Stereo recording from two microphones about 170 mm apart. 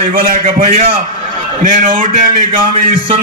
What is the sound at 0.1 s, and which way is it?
Speech, 55° right (ahead or behind).